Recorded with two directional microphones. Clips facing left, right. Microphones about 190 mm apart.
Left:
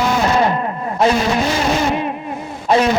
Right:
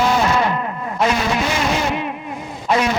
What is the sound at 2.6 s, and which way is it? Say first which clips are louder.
Speech: left 4 dB; 35° left (ahead or behind).